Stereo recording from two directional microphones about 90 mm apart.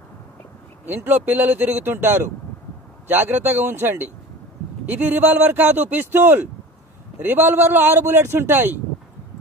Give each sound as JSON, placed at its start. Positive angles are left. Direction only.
{"t": 0.8, "sound": "a man's voice", "side_deg": -20}